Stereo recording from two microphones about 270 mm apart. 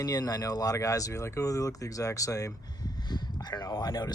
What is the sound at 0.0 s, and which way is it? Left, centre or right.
Speech, centre.